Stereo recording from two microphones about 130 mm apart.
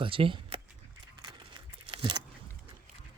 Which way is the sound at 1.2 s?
35° right (ahead or behind).